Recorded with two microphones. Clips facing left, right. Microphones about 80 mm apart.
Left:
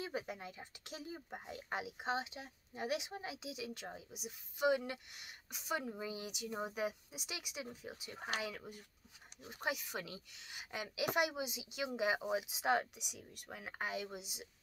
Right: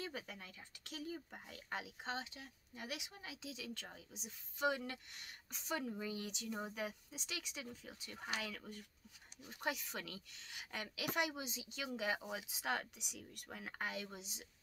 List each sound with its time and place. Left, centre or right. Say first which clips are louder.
0.0 s speech: left 5 dB; centre
13.0 s speech: even; centre